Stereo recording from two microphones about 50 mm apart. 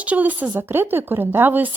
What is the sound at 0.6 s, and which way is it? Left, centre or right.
Speech, right.